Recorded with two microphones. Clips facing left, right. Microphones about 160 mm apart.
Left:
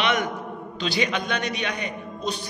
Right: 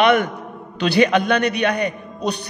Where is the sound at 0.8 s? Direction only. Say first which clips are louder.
Right 10 dB; 60° right (ahead or behind).